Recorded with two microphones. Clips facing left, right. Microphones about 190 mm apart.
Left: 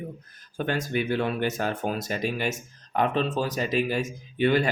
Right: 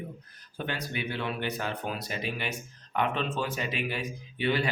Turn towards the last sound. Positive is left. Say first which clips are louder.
# left 6 dB
turn(degrees=45)  # may be behind; listen again after turning